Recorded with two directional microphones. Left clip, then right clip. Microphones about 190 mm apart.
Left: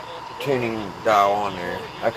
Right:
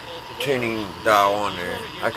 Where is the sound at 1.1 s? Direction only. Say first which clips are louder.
Even; 35° right (ahead or behind).